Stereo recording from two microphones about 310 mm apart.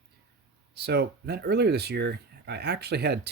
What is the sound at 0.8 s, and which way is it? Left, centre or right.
Speech, right.